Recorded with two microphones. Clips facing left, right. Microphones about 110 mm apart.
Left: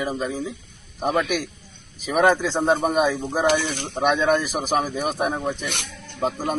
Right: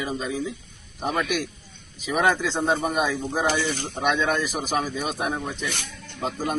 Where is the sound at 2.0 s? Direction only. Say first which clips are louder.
Left 4 dB; 50° left (ahead or behind).